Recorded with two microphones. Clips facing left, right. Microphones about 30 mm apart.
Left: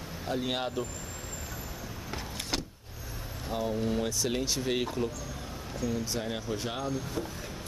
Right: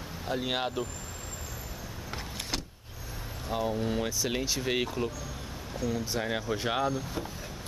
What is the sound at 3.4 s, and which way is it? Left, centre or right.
Speech, centre.